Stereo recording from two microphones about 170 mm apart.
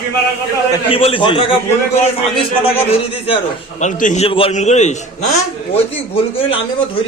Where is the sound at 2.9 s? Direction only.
35° left (ahead or behind).